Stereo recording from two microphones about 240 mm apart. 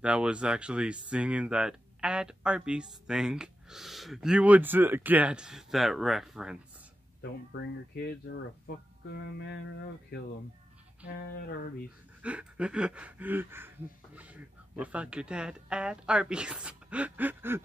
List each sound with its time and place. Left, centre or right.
0.0 s speech: centre
7.2 s speech: left
12.2 s speech: centre